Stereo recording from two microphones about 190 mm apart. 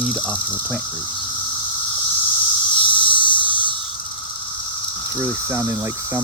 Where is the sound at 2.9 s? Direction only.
25° left (ahead or behind).